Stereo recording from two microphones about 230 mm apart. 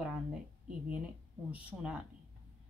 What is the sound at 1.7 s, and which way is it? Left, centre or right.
Speech, centre.